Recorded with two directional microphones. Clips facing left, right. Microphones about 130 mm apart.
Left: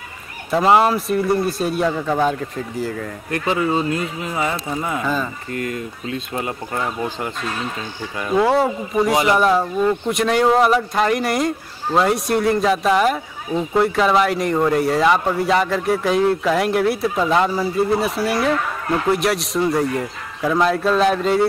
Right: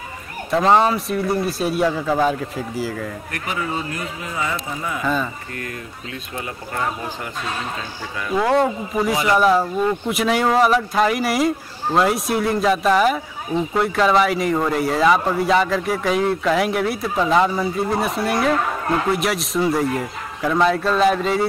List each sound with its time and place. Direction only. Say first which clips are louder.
0.5 s speech: left 1 dB; 5° left (ahead or behind)
3.3 s speech: left 10 dB; 25° left (ahead or behind)
5.0 s speech: right 4 dB; centre (ahead or behind)
5.6 s speech: left 8 dB; 25° left (ahead or behind)
8.4 s speech: left 1 dB; 5° left (ahead or behind)
9.1 s speech: left 1 dB; 25° left (ahead or behind)
9.4 s speech: even; centre (ahead or behind)